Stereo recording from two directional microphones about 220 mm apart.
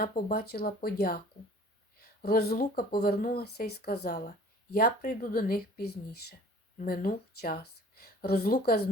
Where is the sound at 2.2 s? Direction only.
45° left (ahead or behind).